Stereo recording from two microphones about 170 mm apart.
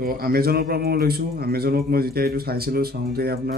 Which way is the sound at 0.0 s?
60° right (ahead or behind).